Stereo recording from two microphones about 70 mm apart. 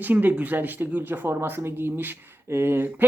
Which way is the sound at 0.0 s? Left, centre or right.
Right.